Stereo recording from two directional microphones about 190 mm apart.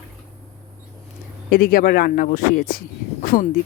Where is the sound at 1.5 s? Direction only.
55° left (ahead or behind).